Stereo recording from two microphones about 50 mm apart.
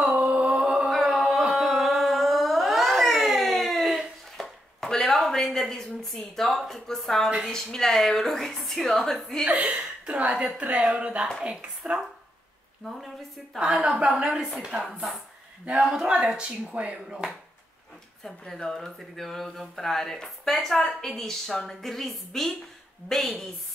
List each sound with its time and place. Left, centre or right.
0.1 s music: right
0.8 s music: centre
1.5 s carnatic music: centre
4.4 s a sound: centre
5.1 s a woman's voice: centre
9.5 s a woman's voice: right
13.7 s a woman's voice: centre
14.9 s a woman's voice: centre
16.1 s a woman's voice: centre
18.2 s a woman's voice: centre